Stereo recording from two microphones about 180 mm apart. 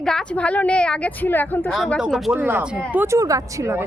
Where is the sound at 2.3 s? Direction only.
10° right (ahead or behind).